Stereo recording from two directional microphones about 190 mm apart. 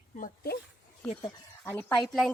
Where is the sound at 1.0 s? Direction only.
5° left (ahead or behind).